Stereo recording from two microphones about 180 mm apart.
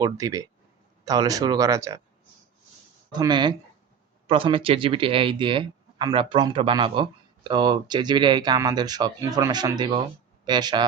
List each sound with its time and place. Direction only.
0.0 s speech: 20° right (ahead or behind)
3.1 s speech: 25° right (ahead or behind)